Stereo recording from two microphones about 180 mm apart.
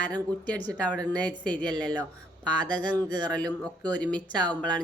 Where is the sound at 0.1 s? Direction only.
5° left (ahead or behind).